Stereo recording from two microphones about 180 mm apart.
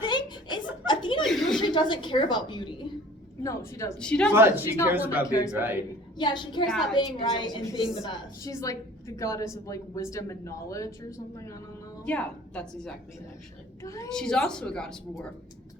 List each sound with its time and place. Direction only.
0.0 s chuckle: 25° left (ahead or behind)
1.2 s chuckle: centre (ahead or behind)
1.6 s a woman's voice: 25° left (ahead or behind)
3.9 s a woman's voice: 5° left (ahead or behind)
4.4 s a woman's voice: 15° right (ahead or behind)
6.1 s a woman's voice: 25° left (ahead or behind)
6.7 s a woman's voice: centre (ahead or behind)
6.9 s a woman's voice: 25° left (ahead or behind)
12.0 s a woman's voice: 5° left (ahead or behind)
14.1 s a woman's voice: 5° left (ahead or behind)